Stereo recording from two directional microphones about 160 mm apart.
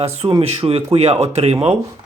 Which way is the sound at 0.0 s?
40° right (ahead or behind).